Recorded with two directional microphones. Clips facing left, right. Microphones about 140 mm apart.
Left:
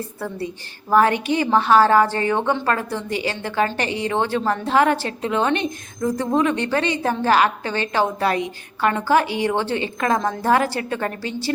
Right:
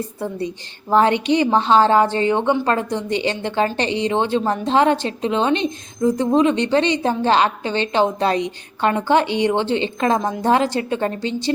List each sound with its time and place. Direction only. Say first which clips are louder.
0.2 s a woman's voice: right 2 dB; 20° right (ahead or behind)